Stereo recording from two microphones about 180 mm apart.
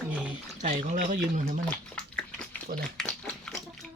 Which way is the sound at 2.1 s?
5° left (ahead or behind).